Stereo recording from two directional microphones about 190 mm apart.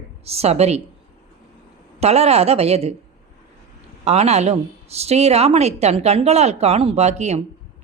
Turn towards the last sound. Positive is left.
turn(degrees=-35)  # may be behind; listen again after turning